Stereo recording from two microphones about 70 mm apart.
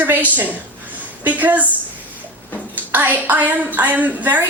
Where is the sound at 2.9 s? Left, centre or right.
Right.